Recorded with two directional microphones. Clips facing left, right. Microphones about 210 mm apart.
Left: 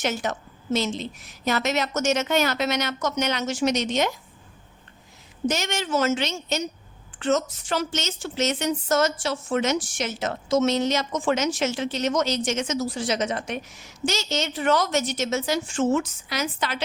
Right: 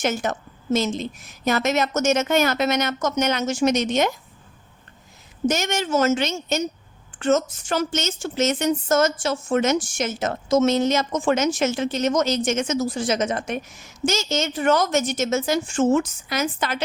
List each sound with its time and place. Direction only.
0.0 s a woman's voice: 50° right (ahead or behind)
5.5 s a woman's voice: 50° right (ahead or behind)